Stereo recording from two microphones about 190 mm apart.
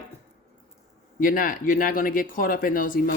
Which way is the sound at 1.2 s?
45° left (ahead or behind).